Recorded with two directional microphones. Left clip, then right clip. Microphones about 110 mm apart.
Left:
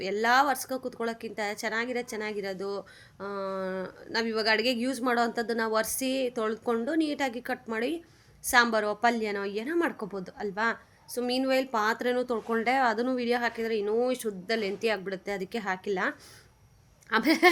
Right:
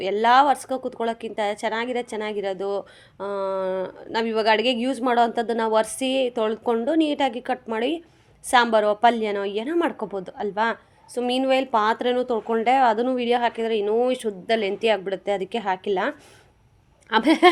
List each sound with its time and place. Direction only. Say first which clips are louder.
0.0 s a woman's voice: right 7 dB; 35° right (ahead or behind)